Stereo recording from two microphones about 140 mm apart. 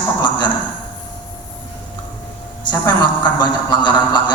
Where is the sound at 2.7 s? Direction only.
30° left (ahead or behind).